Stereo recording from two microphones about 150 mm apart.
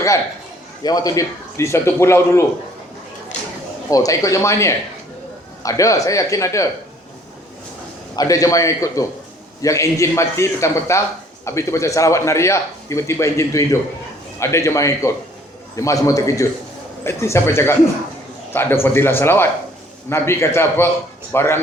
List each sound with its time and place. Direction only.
0.8 s speech: 25° left (ahead or behind)
3.8 s speech: 20° left (ahead or behind)
8.1 s a man's voice: 25° left (ahead or behind)